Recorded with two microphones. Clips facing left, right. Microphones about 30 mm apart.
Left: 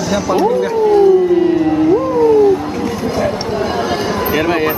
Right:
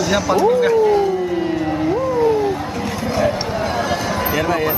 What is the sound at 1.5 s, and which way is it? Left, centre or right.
Cat, centre.